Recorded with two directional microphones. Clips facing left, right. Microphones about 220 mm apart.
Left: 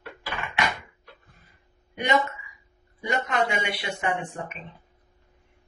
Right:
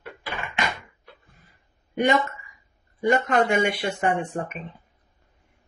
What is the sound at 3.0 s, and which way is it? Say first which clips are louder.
Speech: right 6 dB; 50° right (ahead or behind).